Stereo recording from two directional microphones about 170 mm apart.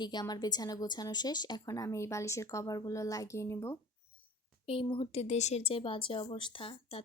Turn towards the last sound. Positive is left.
turn(degrees=30)  # may be behind; listen again after turning